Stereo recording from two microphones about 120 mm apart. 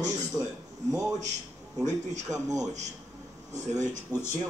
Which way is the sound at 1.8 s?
30° right (ahead or behind).